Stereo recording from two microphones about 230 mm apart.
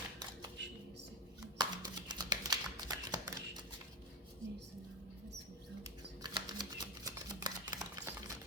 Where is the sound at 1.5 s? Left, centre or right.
Centre.